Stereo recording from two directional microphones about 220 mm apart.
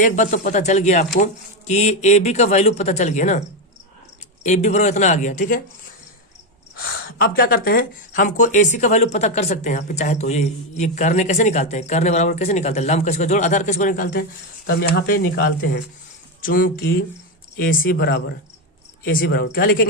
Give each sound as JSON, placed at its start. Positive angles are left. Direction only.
{"t": 0.0, "sound": "speech", "side_deg": 35}
{"t": 4.4, "sound": "speech", "side_deg": 30}
{"t": 6.7, "sound": "speech", "side_deg": 45}